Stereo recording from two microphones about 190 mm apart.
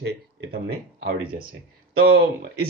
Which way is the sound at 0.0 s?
60° right (ahead or behind).